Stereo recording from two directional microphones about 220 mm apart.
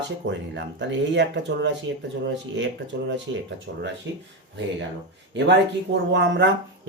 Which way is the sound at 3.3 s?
55° right (ahead or behind).